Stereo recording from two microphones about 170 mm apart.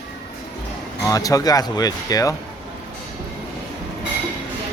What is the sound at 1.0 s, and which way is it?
Speech, 20° left (ahead or behind).